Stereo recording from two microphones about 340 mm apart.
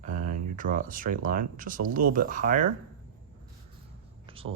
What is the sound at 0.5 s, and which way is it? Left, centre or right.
Speech, right.